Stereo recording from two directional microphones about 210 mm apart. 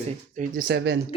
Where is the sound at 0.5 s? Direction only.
50° right (ahead or behind).